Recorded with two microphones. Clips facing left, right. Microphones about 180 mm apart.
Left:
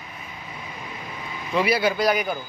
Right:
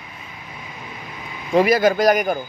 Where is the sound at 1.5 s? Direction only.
45° right (ahead or behind).